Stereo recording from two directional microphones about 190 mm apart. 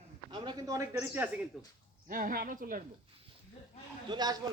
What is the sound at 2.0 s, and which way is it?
Speech, 50° right (ahead or behind).